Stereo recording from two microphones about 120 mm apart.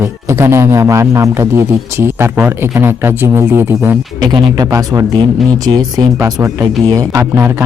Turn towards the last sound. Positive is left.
turn(degrees=-20)  # may be behind; listen again after turning